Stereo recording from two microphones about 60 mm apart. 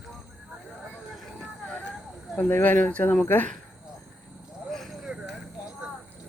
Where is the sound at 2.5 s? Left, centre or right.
Left.